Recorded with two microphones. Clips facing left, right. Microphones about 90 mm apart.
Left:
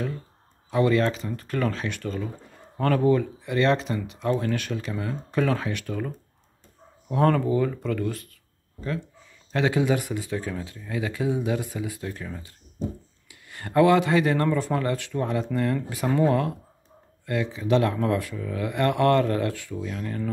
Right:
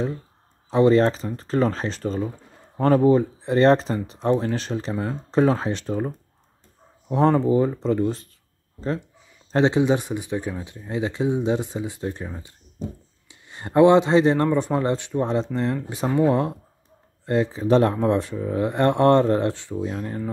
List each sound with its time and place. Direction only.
0.7 s speech: 30° right (ahead or behind)
9.5 s speech: 25° right (ahead or behind)